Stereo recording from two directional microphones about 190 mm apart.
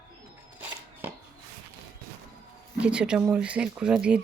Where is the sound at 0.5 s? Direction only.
10° right (ahead or behind).